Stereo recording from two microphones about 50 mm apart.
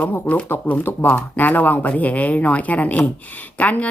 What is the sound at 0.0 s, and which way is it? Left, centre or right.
A woman's voice, left.